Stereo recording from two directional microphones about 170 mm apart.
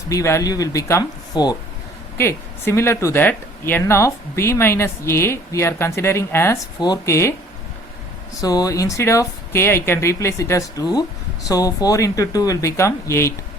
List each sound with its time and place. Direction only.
0.1 s speech: 15° left (ahead or behind)
8.4 s speech: 20° left (ahead or behind)